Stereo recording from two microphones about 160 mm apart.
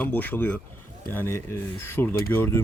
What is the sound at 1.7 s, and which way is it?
Speech, 15° left (ahead or behind).